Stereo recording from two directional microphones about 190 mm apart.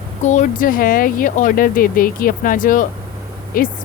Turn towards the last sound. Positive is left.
turn(degrees=45)  # may be behind; listen again after turning